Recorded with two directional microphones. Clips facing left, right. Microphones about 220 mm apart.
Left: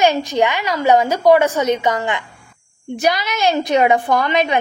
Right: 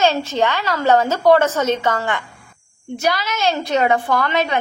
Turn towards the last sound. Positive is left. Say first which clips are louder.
# left 2 dB
turn(degrees=15)  # may be behind; listen again after turning